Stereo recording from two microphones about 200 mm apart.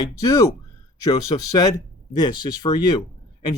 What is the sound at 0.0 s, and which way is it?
Speech, 20° left (ahead or behind).